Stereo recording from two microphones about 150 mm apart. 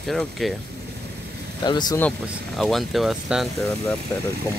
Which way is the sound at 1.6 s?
30° left (ahead or behind).